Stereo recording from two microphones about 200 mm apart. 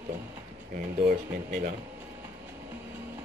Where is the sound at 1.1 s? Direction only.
50° right (ahead or behind).